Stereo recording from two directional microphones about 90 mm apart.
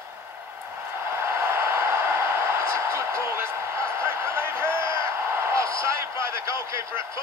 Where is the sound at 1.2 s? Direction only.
25° right (ahead or behind).